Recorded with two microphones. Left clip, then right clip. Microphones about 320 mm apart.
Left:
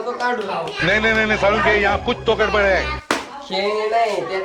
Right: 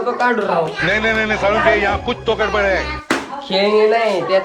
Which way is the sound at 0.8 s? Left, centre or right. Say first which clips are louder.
Even; centre.